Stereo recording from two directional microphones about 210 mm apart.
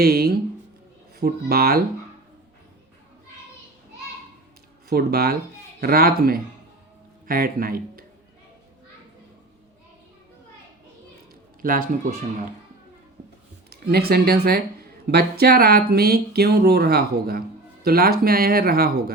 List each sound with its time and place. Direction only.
0.0 s speech: 50° right (ahead or behind)
4.9 s speech: 45° right (ahead or behind)
11.6 s a man's voice: 40° right (ahead or behind)
13.7 s speech: 50° right (ahead or behind)